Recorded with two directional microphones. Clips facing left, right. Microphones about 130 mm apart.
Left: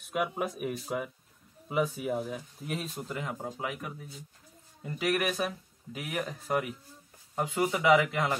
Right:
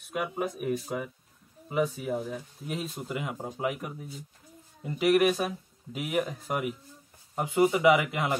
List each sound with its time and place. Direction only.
0.1 s speech: centre (ahead or behind)
2.9 s speech: 10° right (ahead or behind)